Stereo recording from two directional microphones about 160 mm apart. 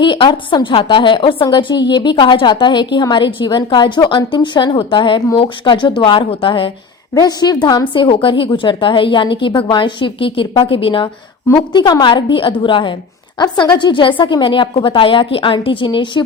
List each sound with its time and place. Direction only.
0.0 s a woman's voice: 30° left (ahead or behind)